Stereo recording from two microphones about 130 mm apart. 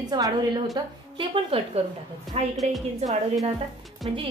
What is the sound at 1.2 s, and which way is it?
Speech, 45° right (ahead or behind).